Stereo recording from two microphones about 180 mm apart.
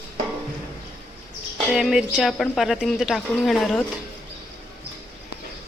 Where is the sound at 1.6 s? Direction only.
Centre (ahead or behind).